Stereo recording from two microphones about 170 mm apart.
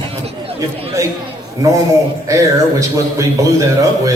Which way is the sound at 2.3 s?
20° right (ahead or behind).